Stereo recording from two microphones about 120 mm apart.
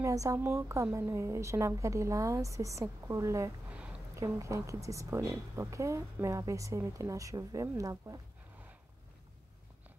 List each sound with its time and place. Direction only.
0.0 s a woman's voice: 25° right (ahead or behind)